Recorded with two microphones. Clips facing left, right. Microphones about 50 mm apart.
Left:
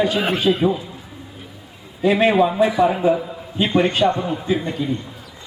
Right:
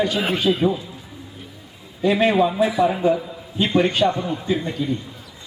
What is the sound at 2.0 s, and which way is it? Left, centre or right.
A man's voice, centre.